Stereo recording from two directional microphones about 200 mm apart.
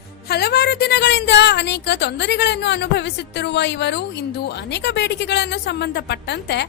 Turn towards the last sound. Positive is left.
turn(degrees=55)  # may be behind; listen again after turning